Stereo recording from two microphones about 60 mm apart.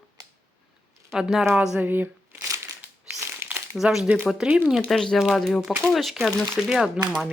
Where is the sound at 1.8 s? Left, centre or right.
Right.